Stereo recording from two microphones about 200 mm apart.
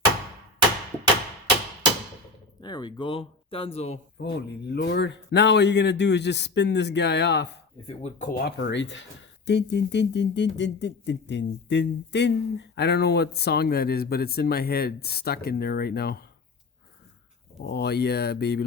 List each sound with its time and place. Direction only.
2.6 s speech: 20° left (ahead or behind)
4.2 s a man's voice: 60° left (ahead or behind)
7.9 s speech: 30° left (ahead or behind)
8.3 s a man's voice: 50° left (ahead or behind)
17.6 s a man's voice: 60° left (ahead or behind)